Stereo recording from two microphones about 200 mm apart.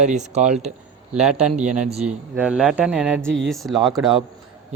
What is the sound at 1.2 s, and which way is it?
A man's voice, 5° right (ahead or behind).